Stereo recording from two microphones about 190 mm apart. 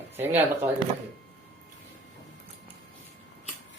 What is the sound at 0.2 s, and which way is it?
Speech, 10° right (ahead or behind).